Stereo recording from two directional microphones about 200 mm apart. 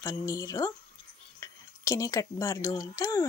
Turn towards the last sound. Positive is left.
turn(degrees=15)  # may be behind; listen again after turning